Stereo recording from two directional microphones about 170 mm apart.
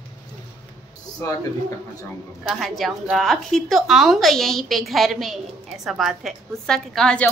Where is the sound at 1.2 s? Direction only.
20° left (ahead or behind).